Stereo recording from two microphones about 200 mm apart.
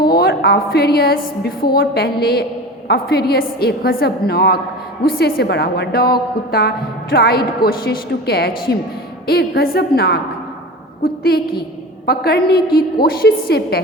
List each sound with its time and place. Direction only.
0.0 s a woman's voice: 50° left (ahead or behind)